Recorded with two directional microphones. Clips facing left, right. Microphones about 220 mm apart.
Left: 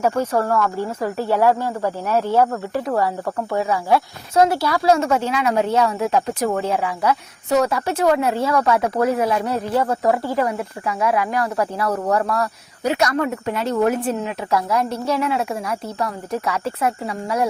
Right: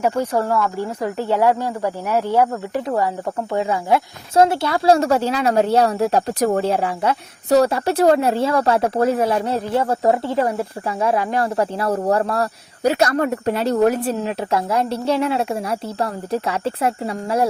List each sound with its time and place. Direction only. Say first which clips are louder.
0.0 s speech: even; 15° right (ahead or behind); by 17.5 s 30° right (ahead or behind)